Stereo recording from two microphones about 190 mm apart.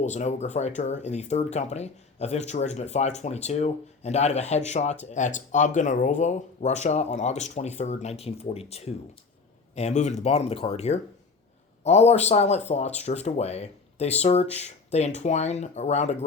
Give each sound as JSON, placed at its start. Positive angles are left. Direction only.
{"t": 0.0, "sound": "speech", "side_deg": 40}